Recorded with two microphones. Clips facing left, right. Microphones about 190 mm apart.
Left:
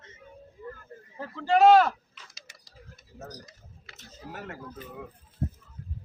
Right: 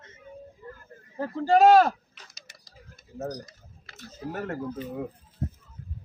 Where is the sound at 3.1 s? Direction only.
40° right (ahead or behind).